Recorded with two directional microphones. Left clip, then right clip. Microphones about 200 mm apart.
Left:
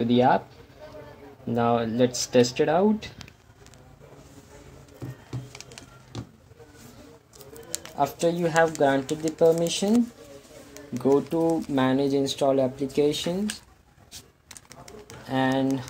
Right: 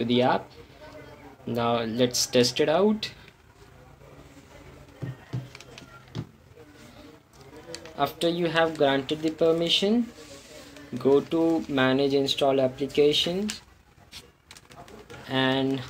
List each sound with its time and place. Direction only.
0.0 s speech: 35° left (ahead or behind)
1.5 s speech: 30° left (ahead or behind)
7.7 s speech: 35° left (ahead or behind)
11.0 s speech: 30° left (ahead or behind)
14.9 s pigeon: 30° left (ahead or behind)